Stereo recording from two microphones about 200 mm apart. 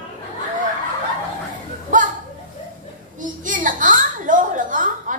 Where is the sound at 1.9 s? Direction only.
40° right (ahead or behind).